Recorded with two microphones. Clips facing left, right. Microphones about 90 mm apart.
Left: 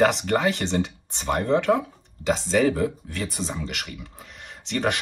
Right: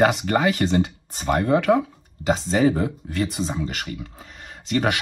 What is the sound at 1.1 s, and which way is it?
Speech, 55° right (ahead or behind).